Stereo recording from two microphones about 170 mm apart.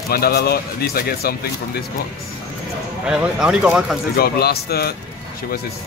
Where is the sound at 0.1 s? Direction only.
65° left (ahead or behind).